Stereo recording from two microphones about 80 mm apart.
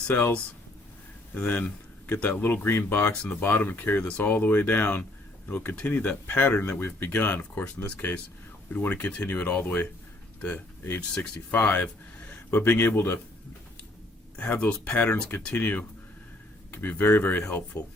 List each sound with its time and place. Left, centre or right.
0.1 s speech: left
1.5 s speech: left
5.7 s speech: centre
11.1 s speech: centre
12.3 s a sound: centre
12.7 s speech: left
14.3 s speech: centre